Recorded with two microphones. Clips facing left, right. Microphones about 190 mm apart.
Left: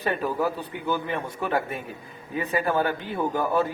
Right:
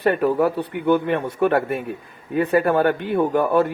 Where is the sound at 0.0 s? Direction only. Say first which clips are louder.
Right 8 dB; 60° right (ahead or behind).